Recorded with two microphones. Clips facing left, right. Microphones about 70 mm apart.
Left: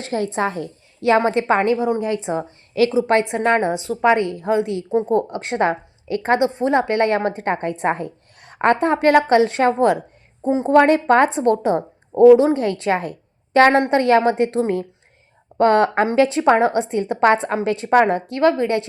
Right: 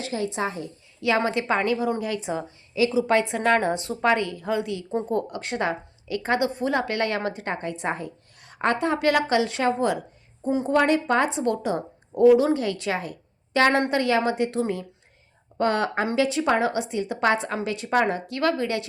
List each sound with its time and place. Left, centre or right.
0.0 s a woman's voice: left
2.8 s a woman's voice: left
3.2 s a woman's voice: left
3.6 s a woman's voice: centre
4.0 s a woman's voice: left
10.4 s a woman's voice: left
10.7 s a woman's voice: left
13.7 s a woman's voice: left